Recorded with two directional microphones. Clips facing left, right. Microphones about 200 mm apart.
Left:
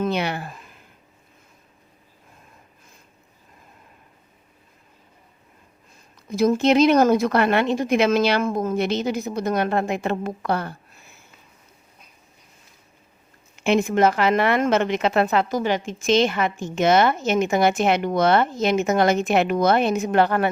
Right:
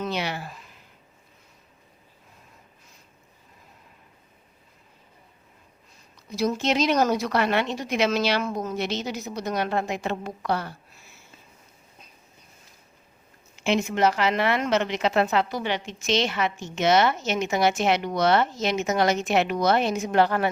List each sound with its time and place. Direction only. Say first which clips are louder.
0.0 s a sound: left 5 dB; 55° left (ahead or behind)
6.1 s a woman's voice: left 6 dB; 50° left (ahead or behind)
13.6 s a woman's voice: left 4 dB; 55° left (ahead or behind)